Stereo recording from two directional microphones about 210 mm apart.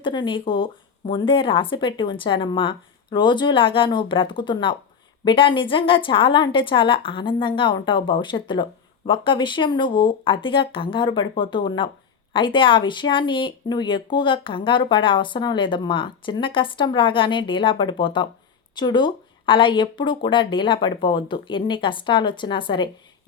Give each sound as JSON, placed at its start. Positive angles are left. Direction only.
{"t": 0.0, "sound": "speech", "side_deg": 20}